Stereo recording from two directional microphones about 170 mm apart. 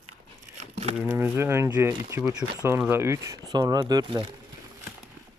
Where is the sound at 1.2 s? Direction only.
15° right (ahead or behind).